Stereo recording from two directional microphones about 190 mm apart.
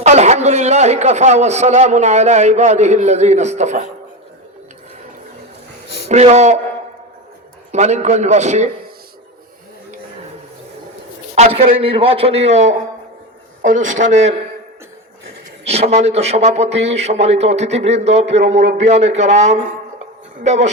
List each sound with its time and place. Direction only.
0.0 s a man's voice: 35° right (ahead or behind)
6.1 s a man's voice: 35° right (ahead or behind)
7.7 s a man's voice: 35° right (ahead or behind)
11.3 s a man's voice: 30° right (ahead or behind)
15.6 s a man's voice: 35° right (ahead or behind)